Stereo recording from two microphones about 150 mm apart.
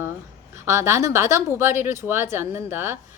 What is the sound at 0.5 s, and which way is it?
Speech, 20° right (ahead or behind).